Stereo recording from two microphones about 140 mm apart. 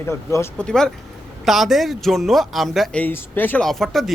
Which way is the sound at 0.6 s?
5° left (ahead or behind).